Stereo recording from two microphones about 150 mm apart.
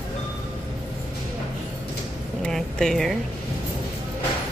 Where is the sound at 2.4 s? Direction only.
5° left (ahead or behind).